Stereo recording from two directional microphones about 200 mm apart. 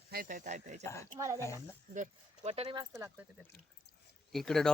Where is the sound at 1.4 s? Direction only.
15° left (ahead or behind).